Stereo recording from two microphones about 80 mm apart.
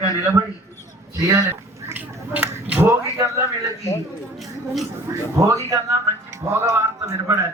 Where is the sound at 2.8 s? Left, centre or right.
Right.